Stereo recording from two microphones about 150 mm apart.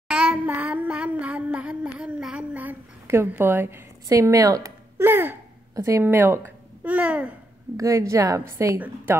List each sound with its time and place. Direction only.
0.1 s child singing: 5° right (ahead or behind)
7.7 s a woman's voice: 20° right (ahead or behind)